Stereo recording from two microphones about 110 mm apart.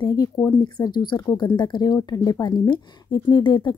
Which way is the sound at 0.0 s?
35° left (ahead or behind).